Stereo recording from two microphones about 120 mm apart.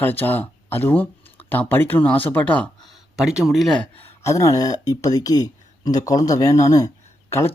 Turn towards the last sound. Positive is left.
turn(degrees=25)  # may be behind; listen again after turning